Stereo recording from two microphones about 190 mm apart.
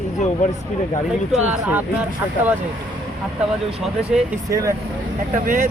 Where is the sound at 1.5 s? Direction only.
10° right (ahead or behind).